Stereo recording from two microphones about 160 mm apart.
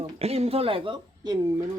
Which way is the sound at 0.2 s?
40° right (ahead or behind).